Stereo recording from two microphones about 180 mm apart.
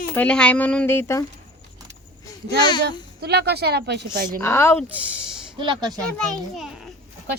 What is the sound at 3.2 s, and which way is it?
Speech, 65° right (ahead or behind).